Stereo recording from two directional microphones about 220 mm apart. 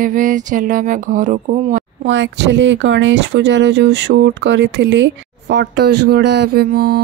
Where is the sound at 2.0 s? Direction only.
55° right (ahead or behind).